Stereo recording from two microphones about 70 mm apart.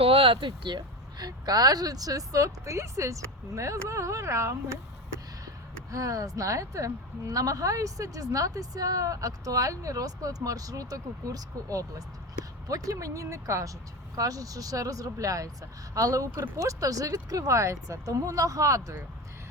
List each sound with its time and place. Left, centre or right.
0.7 s speech: right
5.9 s a woman's voice: right